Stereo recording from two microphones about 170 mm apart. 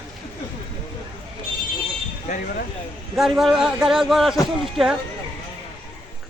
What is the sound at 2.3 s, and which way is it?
Speech, 45° left (ahead or behind).